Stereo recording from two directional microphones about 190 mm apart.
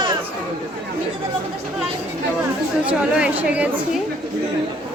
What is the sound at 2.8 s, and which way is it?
Speech, 5° right (ahead or behind).